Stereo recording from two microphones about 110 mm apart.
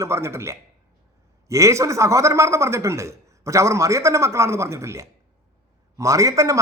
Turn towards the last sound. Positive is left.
turn(degrees=-30)  # may be behind; listen again after turning